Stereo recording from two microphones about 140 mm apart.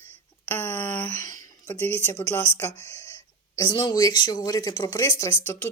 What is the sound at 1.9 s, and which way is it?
Speech, 20° left (ahead or behind).